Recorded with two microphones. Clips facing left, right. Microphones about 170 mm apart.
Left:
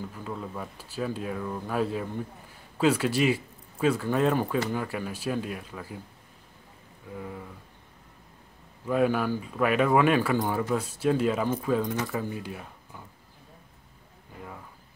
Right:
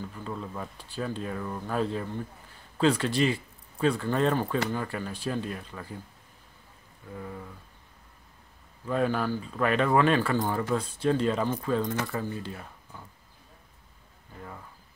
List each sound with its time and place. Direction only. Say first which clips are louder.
0.1 s speech: left 1 dB; 5° left (ahead or behind)
7.2 s speech: left 1 dB; 5° left (ahead or behind)
8.8 s speech: left 2 dB; 10° left (ahead or behind)